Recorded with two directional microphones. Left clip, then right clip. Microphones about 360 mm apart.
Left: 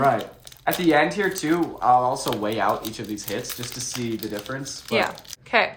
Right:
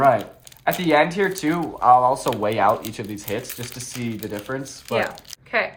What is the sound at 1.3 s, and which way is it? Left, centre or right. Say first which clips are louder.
Speech: even; right.